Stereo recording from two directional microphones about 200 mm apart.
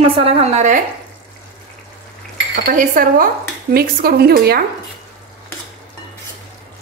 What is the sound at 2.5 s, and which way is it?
A woman's voice, 45° right (ahead or behind).